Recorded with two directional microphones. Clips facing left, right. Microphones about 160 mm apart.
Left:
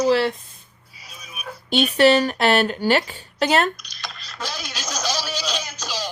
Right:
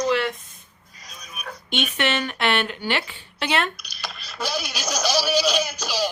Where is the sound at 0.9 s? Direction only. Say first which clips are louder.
Even; 5° left (ahead or behind).